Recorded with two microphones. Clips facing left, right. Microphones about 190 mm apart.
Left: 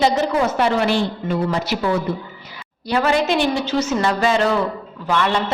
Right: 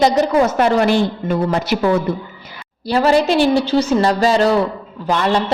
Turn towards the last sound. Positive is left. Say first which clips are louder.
# right 3 dB
turn(degrees=-35)  # may be behind; listen again after turning